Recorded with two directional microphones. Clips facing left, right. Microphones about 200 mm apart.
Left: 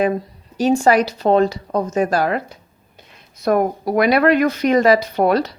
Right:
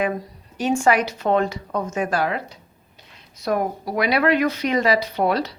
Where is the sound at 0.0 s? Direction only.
35° left (ahead or behind).